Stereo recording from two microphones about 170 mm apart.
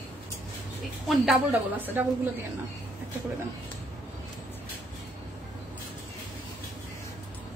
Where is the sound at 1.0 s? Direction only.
Centre (ahead or behind).